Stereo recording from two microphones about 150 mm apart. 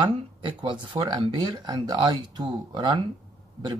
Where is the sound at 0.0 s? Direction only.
35° right (ahead or behind).